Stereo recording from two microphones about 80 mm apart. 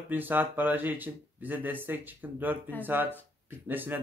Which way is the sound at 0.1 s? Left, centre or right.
Right.